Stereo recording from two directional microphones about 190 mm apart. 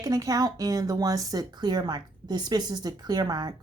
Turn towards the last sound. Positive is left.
turn(degrees=-20)  # may be behind; listen again after turning